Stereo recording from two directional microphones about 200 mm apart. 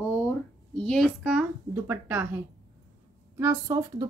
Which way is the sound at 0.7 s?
Centre (ahead or behind).